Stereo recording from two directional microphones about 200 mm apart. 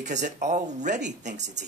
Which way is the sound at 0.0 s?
35° right (ahead or behind).